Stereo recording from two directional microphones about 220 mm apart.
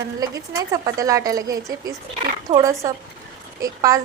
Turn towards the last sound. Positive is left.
turn(degrees=-15)  # may be behind; listen again after turning